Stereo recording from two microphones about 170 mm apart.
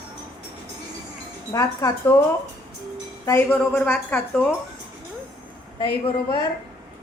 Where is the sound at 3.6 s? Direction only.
5° left (ahead or behind).